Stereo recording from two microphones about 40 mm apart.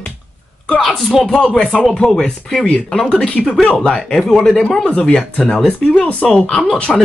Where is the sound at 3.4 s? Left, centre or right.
Centre.